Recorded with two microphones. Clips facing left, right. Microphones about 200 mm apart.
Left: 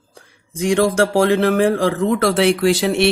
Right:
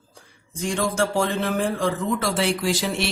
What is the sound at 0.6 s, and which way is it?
Speech, 75° left (ahead or behind).